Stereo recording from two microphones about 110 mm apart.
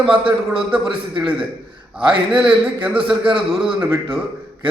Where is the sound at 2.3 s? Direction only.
50° right (ahead or behind).